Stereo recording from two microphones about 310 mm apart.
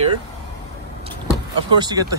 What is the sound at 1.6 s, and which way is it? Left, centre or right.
Speech, centre.